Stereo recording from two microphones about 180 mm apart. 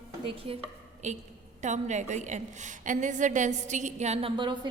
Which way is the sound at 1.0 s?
40° right (ahead or behind).